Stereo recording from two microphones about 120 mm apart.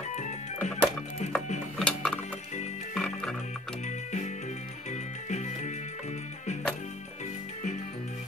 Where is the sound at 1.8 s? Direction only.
5° left (ahead or behind).